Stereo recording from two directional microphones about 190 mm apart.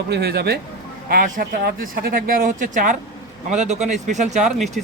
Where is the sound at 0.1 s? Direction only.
60° right (ahead or behind).